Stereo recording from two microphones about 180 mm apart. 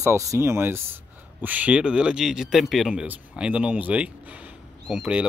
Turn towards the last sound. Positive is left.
turn(degrees=-5)  # may be behind; listen again after turning